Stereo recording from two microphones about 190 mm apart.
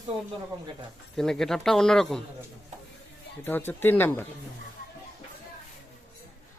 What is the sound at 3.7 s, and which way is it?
Speech, 10° left (ahead or behind).